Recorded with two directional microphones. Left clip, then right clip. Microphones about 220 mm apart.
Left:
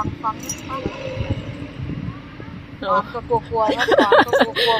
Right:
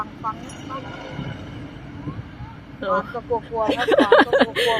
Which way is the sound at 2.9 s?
35° left (ahead or behind).